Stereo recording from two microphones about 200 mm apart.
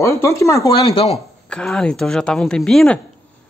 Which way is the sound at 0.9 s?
30° left (ahead or behind).